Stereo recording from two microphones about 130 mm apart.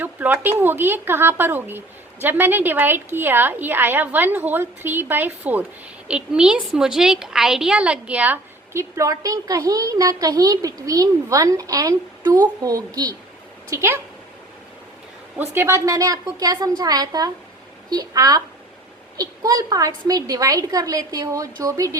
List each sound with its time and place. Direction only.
0.0 s a woman's voice: 15° right (ahead or behind)
15.4 s a woman's voice: 20° right (ahead or behind)